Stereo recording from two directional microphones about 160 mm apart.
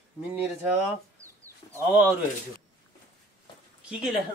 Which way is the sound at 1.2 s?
20° right (ahead or behind).